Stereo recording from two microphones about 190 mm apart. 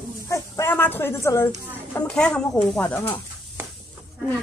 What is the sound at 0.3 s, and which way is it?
Speech, 15° left (ahead or behind).